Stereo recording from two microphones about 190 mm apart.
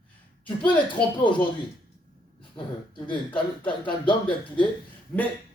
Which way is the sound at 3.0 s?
25° left (ahead or behind).